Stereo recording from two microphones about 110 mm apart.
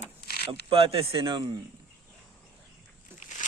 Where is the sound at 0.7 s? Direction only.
60° right (ahead or behind).